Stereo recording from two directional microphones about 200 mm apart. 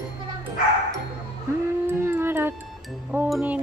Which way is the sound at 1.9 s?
10° right (ahead or behind).